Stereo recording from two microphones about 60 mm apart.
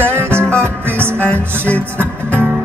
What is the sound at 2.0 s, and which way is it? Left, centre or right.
Music, right.